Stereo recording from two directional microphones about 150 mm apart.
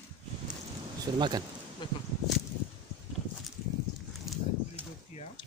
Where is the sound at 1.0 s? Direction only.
30° right (ahead or behind).